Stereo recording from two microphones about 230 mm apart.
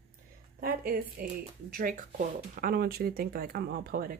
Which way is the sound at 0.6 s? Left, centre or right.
Right.